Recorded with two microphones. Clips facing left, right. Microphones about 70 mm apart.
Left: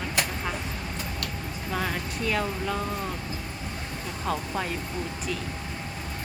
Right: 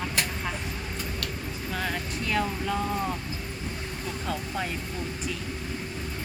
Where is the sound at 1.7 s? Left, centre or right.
Centre.